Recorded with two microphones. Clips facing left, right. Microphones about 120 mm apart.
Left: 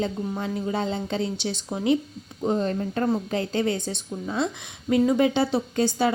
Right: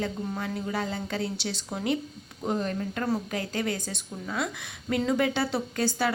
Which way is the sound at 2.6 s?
30° left (ahead or behind).